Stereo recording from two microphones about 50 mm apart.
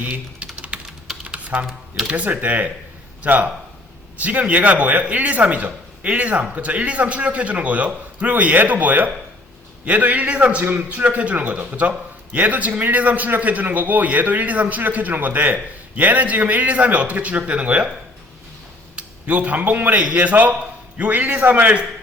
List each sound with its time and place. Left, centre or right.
0.1 s typing: right
1.2 s computer keyboard: right
2.0 s a man's voice: right
18.9 s a man's voice: right